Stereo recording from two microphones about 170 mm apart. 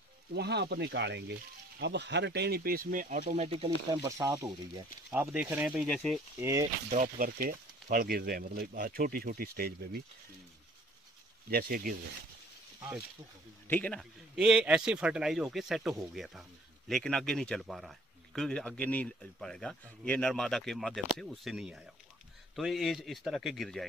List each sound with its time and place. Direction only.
0.3 s speech: 80° right; by 3.4 s 50° right (ahead or behind)
3.4 s speech: 35° right (ahead or behind)
4.2 s speech: 20° right (ahead or behind)
5.1 s speech: 10° right (ahead or behind)
6.4 s speech: 20° right (ahead or behind)
6.9 s speech: 50° right (ahead or behind)
11.5 s speech: 60° right (ahead or behind)
13.7 s a man's voice: 10° left (ahead or behind)
14.3 s speech: 5° right (ahead or behind)